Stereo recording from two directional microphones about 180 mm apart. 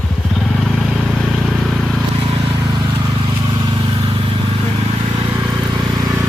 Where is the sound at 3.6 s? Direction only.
25° right (ahead or behind).